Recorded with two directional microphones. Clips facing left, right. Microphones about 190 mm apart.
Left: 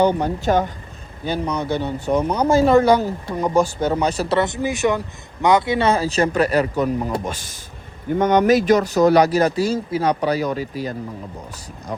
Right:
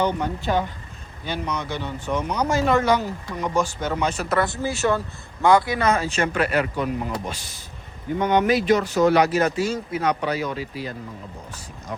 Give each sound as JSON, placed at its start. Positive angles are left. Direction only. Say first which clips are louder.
{"t": 0.2, "sound": "a man's voice", "louder": "left 5 dB", "side_deg": 45}